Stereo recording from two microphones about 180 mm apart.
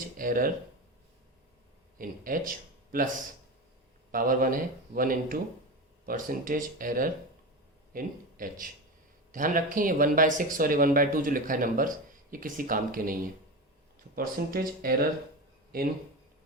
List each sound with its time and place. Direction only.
0.0 s speech: 50° right (ahead or behind)
2.0 s speech: 50° right (ahead or behind)
4.1 s speech: 50° right (ahead or behind)
14.2 s speech: 55° right (ahead or behind)